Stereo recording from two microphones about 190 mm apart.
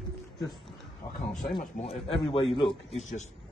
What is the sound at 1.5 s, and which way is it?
Speech, 25° left (ahead or behind).